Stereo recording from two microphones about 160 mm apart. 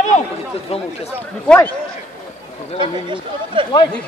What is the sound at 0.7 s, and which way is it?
Speech, 40° left (ahead or behind).